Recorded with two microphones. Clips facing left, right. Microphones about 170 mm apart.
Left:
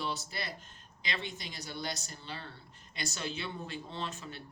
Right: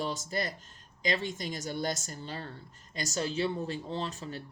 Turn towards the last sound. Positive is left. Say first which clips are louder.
# right 5 dB
turn(degrees=-40)  # may be behind; listen again after turning